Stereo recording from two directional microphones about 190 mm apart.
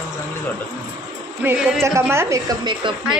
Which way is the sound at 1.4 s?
5° right (ahead or behind).